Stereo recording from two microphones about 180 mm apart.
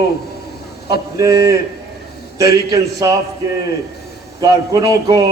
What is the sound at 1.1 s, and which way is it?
Speech, 15° right (ahead or behind).